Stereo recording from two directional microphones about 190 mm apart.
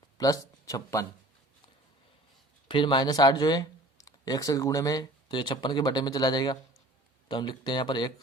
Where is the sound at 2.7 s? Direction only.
25° left (ahead or behind).